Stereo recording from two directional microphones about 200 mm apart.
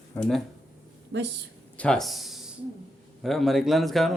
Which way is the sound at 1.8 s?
5° left (ahead or behind).